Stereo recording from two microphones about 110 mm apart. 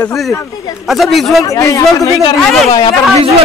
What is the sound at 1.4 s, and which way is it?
Speech, 30° left (ahead or behind).